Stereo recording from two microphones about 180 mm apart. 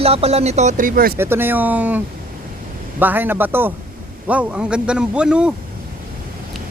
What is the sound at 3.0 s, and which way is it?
A man's voice, 10° right (ahead or behind).